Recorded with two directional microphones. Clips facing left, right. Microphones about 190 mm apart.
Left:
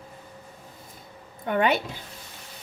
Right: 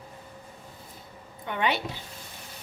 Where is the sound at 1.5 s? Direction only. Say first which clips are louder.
Left 5 dB; 50° left (ahead or behind).